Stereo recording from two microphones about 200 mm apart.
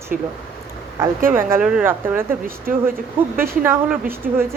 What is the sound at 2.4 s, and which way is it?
Speech, 45° right (ahead or behind).